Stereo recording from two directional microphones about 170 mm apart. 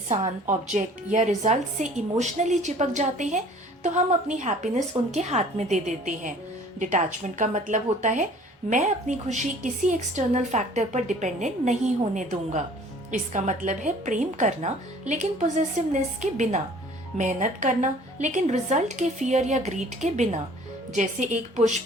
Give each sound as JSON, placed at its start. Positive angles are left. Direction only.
{"t": 0.4, "sound": "a woman's voice", "side_deg": -45}